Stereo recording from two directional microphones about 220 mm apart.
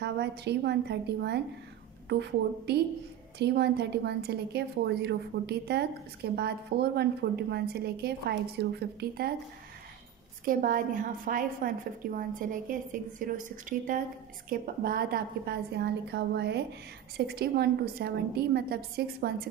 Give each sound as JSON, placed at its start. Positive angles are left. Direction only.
{"t": 0.0, "sound": "a woman's voice", "side_deg": -50}
{"t": 10.4, "sound": "a woman's voice", "side_deg": -40}